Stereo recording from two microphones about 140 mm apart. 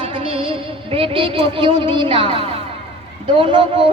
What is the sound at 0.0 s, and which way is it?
Music, 40° right (ahead or behind).